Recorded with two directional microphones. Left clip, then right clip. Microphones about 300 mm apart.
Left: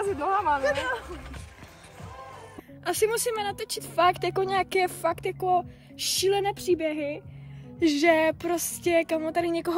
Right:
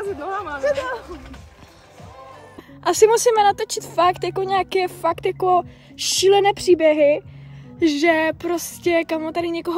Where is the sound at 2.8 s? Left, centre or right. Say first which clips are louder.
Right 11 dB; centre.